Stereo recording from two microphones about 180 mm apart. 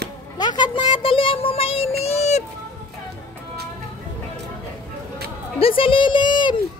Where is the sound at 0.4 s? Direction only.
25° left (ahead or behind).